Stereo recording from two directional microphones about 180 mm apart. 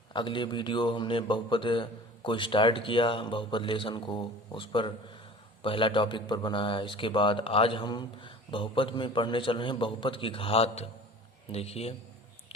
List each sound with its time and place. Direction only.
0.1 s a man's voice: 25° left (ahead or behind)